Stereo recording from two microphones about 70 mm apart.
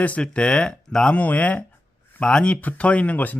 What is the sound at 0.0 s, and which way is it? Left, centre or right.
Speech, centre.